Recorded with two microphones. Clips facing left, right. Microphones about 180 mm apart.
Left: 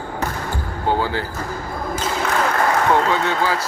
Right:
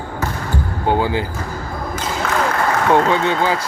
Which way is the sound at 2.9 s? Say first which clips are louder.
Right 3 dB; 20° right (ahead or behind).